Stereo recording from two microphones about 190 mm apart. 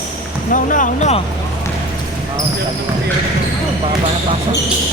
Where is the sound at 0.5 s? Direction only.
45° left (ahead or behind).